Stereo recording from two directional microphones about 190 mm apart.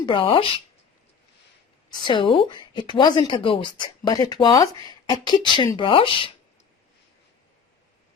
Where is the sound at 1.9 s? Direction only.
25° left (ahead or behind).